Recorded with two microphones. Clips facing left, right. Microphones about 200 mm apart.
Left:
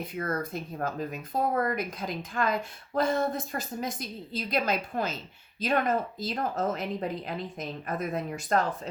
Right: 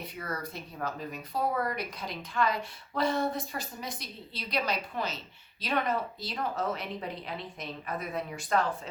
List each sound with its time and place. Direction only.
0.2 s a woman's voice: 50° left (ahead or behind)